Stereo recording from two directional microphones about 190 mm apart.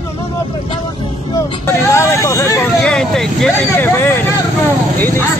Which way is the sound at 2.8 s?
5° left (ahead or behind).